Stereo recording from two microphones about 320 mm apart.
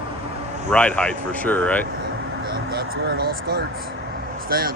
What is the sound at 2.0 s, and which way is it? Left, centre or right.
Speech, right.